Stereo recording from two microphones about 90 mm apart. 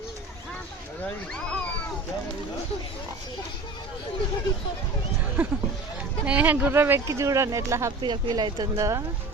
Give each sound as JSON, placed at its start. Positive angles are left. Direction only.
{"t": 1.3, "sound": "a sound", "side_deg": 10}
{"t": 5.4, "sound": "speech", "side_deg": -20}
{"t": 7.1, "sound": "speech", "side_deg": -35}
{"t": 8.0, "sound": "speech", "side_deg": -50}
{"t": 8.7, "sound": "speech", "side_deg": -35}